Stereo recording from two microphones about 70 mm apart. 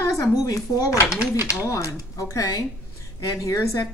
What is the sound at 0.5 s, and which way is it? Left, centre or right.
Speech, left.